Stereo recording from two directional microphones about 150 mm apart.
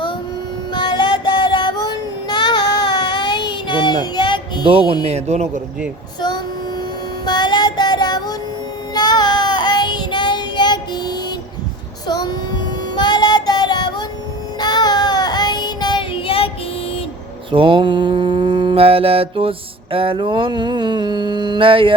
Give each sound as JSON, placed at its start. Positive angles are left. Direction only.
{"t": 0.7, "sound": "child singing", "side_deg": 30}
{"t": 4.6, "sound": "mantra", "side_deg": -35}
{"t": 5.0, "sound": "a man's voice", "side_deg": -45}
{"t": 7.3, "sound": "music", "side_deg": 30}
{"t": 9.0, "sound": "child singing", "side_deg": 30}
{"t": 17.5, "sound": "mantra", "side_deg": -35}